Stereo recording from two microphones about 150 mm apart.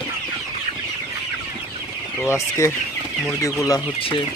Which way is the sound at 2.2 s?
20° left (ahead or behind).